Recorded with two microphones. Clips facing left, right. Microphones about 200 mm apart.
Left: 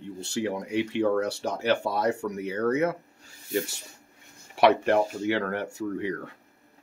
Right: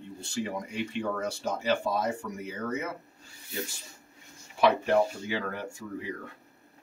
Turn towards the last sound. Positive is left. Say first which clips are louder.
# left 7 dB
turn(degrees=70)  # may be behind; listen again after turning